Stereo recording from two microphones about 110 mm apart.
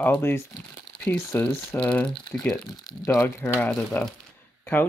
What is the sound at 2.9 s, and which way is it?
Speech, 35° left (ahead or behind).